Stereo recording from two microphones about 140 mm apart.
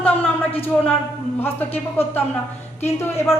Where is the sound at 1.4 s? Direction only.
15° left (ahead or behind).